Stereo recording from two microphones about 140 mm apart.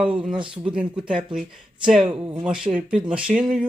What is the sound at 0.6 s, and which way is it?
Speech, 10° right (ahead or behind).